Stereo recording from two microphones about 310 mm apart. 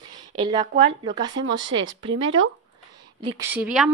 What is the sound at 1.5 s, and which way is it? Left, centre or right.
Speech, right.